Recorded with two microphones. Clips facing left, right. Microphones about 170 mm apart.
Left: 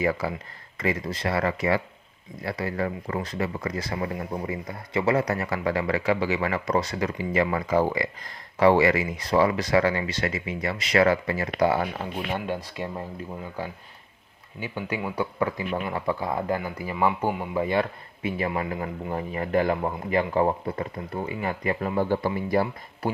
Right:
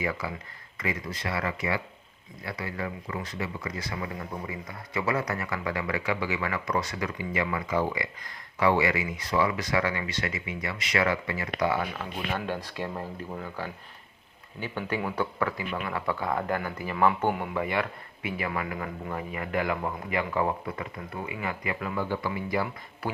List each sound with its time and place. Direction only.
0.0 s speech: 40° left (ahead or behind)
12.6 s speech: 15° left (ahead or behind)
17.5 s speech: 30° left (ahead or behind)